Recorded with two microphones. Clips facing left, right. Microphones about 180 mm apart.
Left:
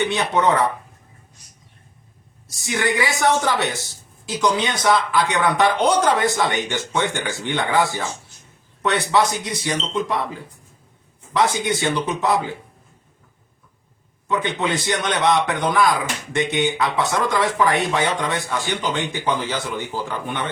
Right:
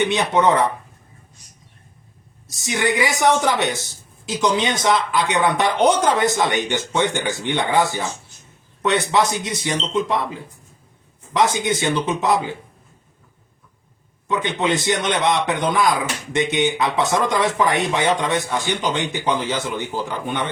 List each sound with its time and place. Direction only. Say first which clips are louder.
0.0 s speech: right 2 dB; 20° right (ahead or behind)
2.5 s speech: right 1 dB; 20° right (ahead or behind)
11.3 s speech: right 1 dB; 20° right (ahead or behind)
14.3 s speech: right 1 dB; 20° right (ahead or behind)